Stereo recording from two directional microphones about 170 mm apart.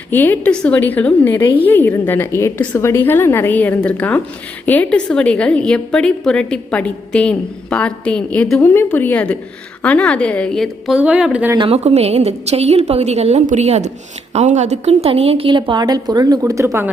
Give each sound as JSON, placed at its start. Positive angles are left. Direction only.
{"t": 0.1, "sound": "a woman's voice", "side_deg": 10}
{"t": 11.5, "sound": "a woman's voice", "side_deg": -35}